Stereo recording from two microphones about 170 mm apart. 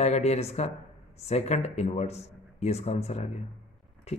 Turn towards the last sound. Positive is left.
turn(degrees=40)  # may be behind; listen again after turning